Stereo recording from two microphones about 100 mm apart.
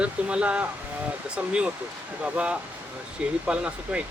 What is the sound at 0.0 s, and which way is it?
Speech, 10° right (ahead or behind).